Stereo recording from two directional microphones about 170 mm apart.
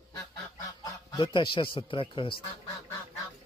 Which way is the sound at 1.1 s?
30° left (ahead or behind).